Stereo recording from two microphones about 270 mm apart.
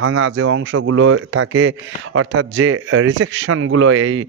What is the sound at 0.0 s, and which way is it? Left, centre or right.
Speech, right.